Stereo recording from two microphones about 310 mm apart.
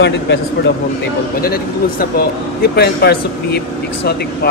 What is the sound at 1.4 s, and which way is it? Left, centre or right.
Speech, left.